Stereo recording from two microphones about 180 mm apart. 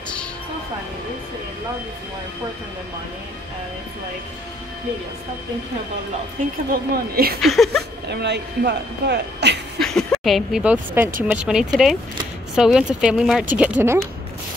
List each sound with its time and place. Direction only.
6.7 s speech: 55° right (ahead or behind)
7.4 s speech: centre (ahead or behind)
8.1 s speech: 70° right (ahead or behind)
9.8 s speech: 5° left (ahead or behind)